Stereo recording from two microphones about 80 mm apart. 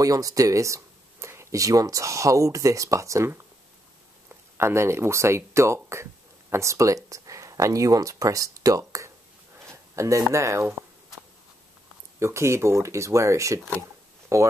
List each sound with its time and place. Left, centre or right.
0.0 s speech: right
4.6 s speech: right
9.7 s a sound: right
10.3 s speech: right
12.2 s speech: right